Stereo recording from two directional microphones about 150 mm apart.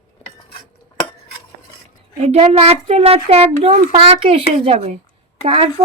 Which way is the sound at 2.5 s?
45° right (ahead or behind).